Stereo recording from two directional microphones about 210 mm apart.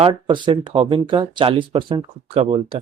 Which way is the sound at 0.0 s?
20° right (ahead or behind).